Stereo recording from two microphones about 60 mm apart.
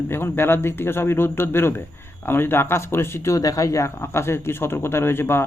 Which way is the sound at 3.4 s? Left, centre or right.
Left.